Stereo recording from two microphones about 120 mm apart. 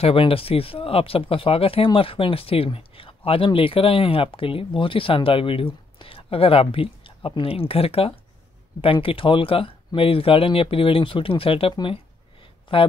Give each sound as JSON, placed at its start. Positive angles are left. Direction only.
{"t": 0.0, "sound": "speech", "side_deg": 50}